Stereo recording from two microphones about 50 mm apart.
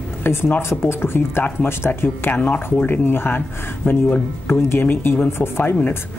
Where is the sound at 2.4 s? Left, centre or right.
Left.